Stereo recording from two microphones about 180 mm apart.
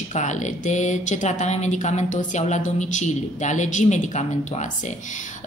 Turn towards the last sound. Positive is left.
turn(degrees=40)  # may be behind; listen again after turning